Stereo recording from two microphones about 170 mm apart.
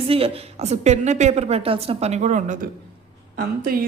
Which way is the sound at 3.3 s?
60° right (ahead or behind).